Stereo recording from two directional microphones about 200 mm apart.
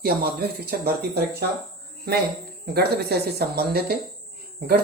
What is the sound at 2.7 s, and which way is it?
Speech, 55° right (ahead or behind).